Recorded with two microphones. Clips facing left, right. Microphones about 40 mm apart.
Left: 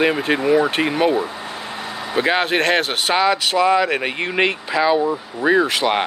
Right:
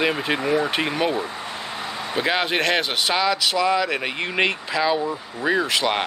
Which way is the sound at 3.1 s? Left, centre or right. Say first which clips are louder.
Left 5 dB; centre.